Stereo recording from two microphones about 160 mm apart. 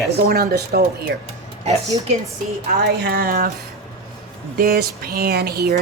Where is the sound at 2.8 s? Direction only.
80° right.